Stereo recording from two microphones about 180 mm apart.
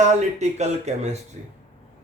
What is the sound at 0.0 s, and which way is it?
A man's voice, 40° right (ahead or behind).